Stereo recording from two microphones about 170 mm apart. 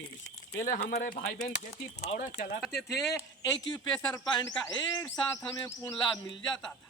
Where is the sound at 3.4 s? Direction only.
25° left (ahead or behind).